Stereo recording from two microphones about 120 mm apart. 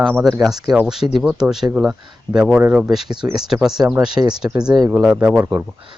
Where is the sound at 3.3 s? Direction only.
5° right (ahead or behind).